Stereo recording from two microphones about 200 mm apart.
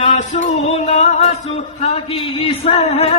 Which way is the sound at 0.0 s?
35° left (ahead or behind).